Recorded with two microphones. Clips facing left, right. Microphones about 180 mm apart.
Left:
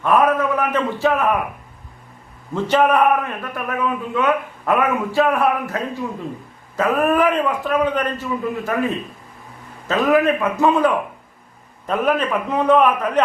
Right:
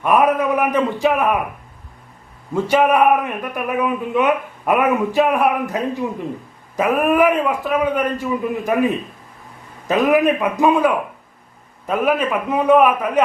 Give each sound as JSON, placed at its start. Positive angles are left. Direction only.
{"t": 0.0, "sound": "speech", "side_deg": -15}
{"t": 2.5, "sound": "speech", "side_deg": -10}